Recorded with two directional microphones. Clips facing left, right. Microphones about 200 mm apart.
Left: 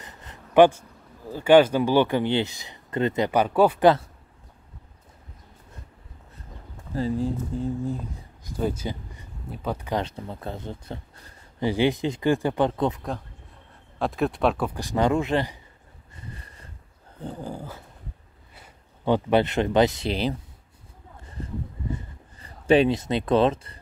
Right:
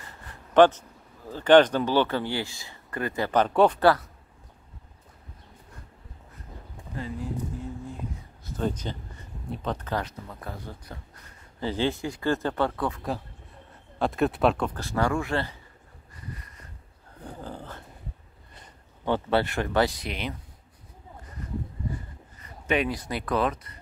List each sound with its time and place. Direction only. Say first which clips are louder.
0.0 s a sound: left 2 dB; 20° left (ahead or behind)
1.3 s speech: left 1 dB; 10° left (ahead or behind)
3.3 s speech: right 1 dB; 10° left (ahead or behind)
3.8 s speech: left 3 dB; 25° left (ahead or behind)
7.0 s speech: left 7 dB; 30° left (ahead or behind)
8.5 s speech: left 2 dB; 10° left (ahead or behind)
9.9 s speech: left 4 dB; 30° left (ahead or behind)
11.6 s speech: left 5 dB; 15° left (ahead or behind)
13.9 s speech: even; centre (ahead or behind)
14.8 s speech: left 4 dB; 20° left (ahead or behind)
16.2 s a sound: right 1 dB; 30° left (ahead or behind)
17.2 s a sound: left 5 dB; 15° left (ahead or behind)
18.5 s speech: left 1 dB; 10° left (ahead or behind); by 20.3 s 30° left (ahead or behind)
21.9 s a sound: left 2 dB; 30° left (ahead or behind)